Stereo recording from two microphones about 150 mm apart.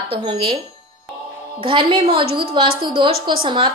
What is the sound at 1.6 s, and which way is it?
A woman's voice, 35° right (ahead or behind).